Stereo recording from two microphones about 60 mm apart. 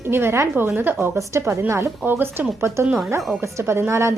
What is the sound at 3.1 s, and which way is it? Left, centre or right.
Speech, right.